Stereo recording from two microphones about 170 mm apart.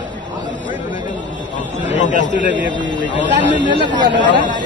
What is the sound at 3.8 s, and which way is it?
Speech, 25° right (ahead or behind).